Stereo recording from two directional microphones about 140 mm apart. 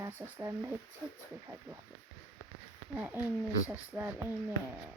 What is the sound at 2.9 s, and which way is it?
Speech, 10° right (ahead or behind).